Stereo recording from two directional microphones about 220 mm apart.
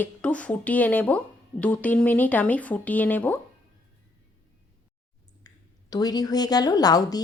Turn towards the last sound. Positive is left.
turn(degrees=15)  # may be behind; listen again after turning